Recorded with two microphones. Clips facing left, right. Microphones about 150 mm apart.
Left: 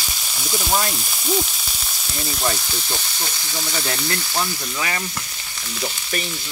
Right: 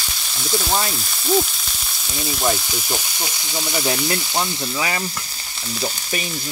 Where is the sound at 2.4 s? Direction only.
15° right (ahead or behind).